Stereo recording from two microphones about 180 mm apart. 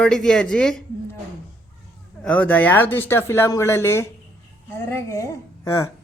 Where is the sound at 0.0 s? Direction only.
5° left (ahead or behind).